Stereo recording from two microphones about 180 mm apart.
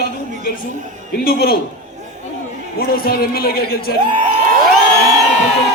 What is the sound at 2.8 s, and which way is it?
A man's voice, 55° left (ahead or behind).